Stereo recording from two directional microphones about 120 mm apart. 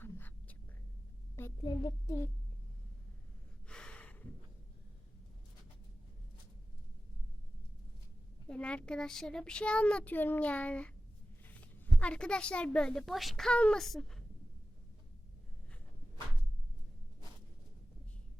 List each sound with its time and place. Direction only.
0.0 s whispering: 15° left (ahead or behind)
1.6 s a child's voice: 30° left (ahead or behind)
3.7 s gasp: 5° left (ahead or behind)
8.4 s a woman's voice: 10° left (ahead or behind)